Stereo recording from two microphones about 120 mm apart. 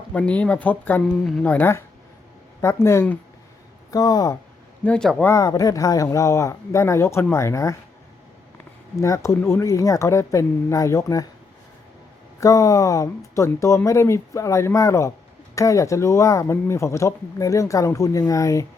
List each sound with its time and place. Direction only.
0.1 s speech: 10° left (ahead or behind); by 4.4 s 30° left (ahead or behind)
4.8 s speech: 10° left (ahead or behind)
5.2 s speech: 25° left (ahead or behind)
9.0 s speech: 25° left (ahead or behind)
12.4 s speech: 30° left (ahead or behind)